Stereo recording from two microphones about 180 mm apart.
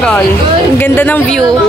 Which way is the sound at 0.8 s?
10° left (ahead or behind).